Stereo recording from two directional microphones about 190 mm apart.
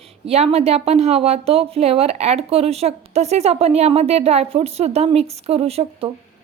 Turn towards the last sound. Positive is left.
turn(degrees=-30)  # may be behind; listen again after turning